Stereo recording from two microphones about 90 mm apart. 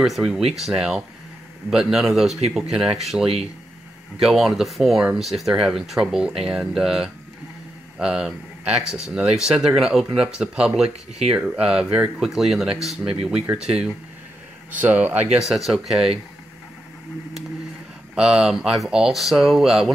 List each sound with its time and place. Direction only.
0.0 s speech: 5° right (ahead or behind)
14.7 s speech: 20° right (ahead or behind)
15.4 s speech: 5° right (ahead or behind)
18.1 s speech: 10° right (ahead or behind)